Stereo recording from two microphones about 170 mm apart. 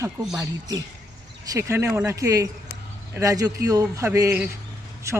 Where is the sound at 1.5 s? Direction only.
20° right (ahead or behind).